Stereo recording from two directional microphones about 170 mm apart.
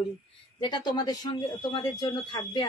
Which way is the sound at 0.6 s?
25° left (ahead or behind).